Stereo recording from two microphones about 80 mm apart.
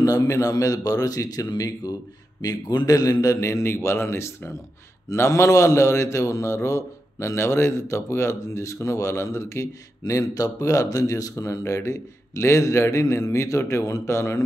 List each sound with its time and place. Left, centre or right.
0.0 s a man's voice: left